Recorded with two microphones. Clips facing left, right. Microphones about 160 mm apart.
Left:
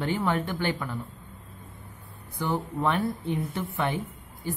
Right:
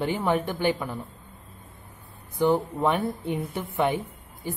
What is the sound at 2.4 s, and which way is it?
Speech, 15° right (ahead or behind).